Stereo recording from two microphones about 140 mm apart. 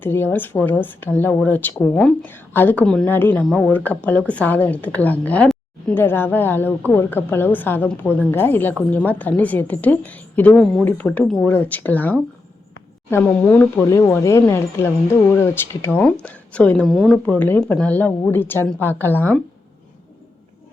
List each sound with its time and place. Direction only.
0.0 s a woman's voice: 15° left (ahead or behind)